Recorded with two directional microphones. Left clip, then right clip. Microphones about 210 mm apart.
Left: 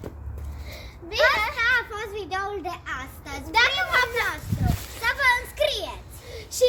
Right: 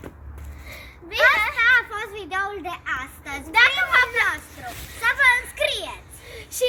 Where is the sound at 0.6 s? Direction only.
Centre (ahead or behind).